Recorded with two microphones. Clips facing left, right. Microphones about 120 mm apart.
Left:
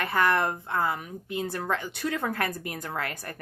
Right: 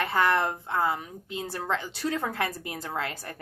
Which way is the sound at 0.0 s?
25° right (ahead or behind).